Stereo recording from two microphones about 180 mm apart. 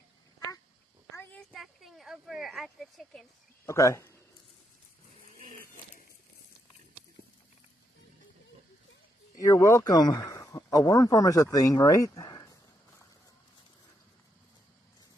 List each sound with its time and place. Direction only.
1.1 s a sound: 10° left (ahead or behind)
3.6 s speech: 15° left (ahead or behind)
9.4 s speech: 15° left (ahead or behind)